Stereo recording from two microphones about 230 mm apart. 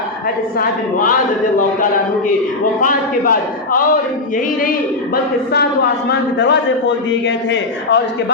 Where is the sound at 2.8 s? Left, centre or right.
Left.